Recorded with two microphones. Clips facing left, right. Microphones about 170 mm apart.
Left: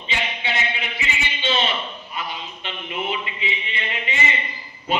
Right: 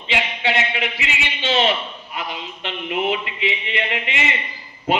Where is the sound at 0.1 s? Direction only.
80° right.